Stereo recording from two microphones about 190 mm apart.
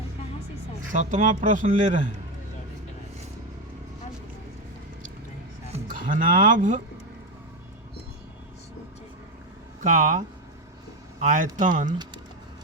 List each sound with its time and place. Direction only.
0.9 s a man's voice: 40° right (ahead or behind)
5.9 s speech: 45° right (ahead or behind)
9.8 s a man's voice: 40° right (ahead or behind)